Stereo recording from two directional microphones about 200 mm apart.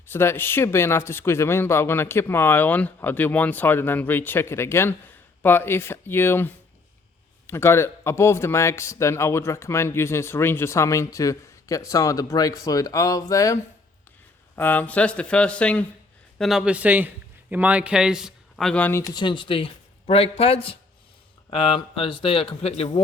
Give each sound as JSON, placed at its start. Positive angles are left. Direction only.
{"t": 0.1, "sound": "a man's voice", "side_deg": 10}